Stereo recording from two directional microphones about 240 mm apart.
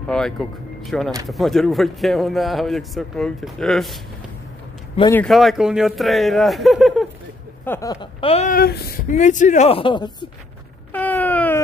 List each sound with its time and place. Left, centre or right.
0.1 s a man's voice: centre
5.1 s a man's voice: centre
7.6 s speech: centre
10.9 s wail: centre